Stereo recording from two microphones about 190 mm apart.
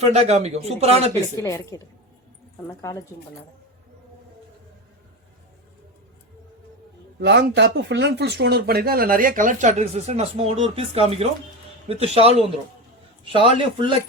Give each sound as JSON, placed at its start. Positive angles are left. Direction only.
{"t": 0.0, "sound": "speech", "side_deg": -35}
{"t": 1.4, "sound": "a woman's voice", "side_deg": 15}
{"t": 7.2, "sound": "a man's voice", "side_deg": -70}